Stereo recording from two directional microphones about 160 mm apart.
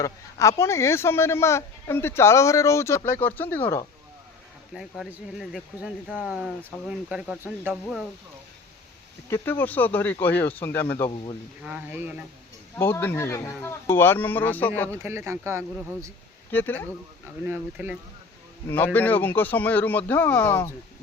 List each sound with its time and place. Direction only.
0.0 s speech: 20° left (ahead or behind)
4.7 s speech: centre (ahead or behind)
9.3 s speech: 10° left (ahead or behind)
11.6 s speech: 10° right (ahead or behind)
12.7 s speech: 15° left (ahead or behind)
14.9 s speech: 15° right (ahead or behind)
16.5 s speech: 10° left (ahead or behind)
17.4 s speech: 10° right (ahead or behind)
18.9 s speech: 10° left (ahead or behind)